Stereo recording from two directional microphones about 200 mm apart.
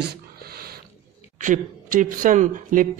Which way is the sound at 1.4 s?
40° right (ahead or behind).